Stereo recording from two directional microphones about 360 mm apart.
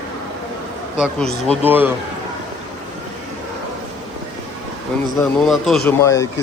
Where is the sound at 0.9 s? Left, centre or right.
Centre.